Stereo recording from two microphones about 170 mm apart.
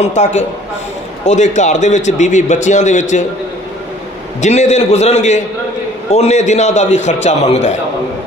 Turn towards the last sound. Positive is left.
turn(degrees=40)  # may be behind; listen again after turning